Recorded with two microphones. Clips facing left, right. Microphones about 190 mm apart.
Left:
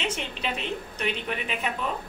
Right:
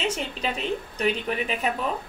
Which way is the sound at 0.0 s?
40° right (ahead or behind).